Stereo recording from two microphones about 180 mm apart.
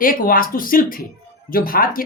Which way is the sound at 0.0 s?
50° left (ahead or behind).